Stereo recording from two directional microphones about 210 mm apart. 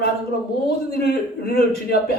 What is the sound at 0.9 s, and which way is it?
Speech, 45° left (ahead or behind).